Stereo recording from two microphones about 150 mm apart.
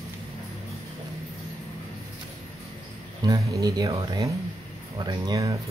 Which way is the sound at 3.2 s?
25° right (ahead or behind).